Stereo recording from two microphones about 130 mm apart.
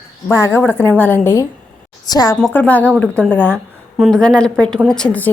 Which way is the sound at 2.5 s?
15° left (ahead or behind).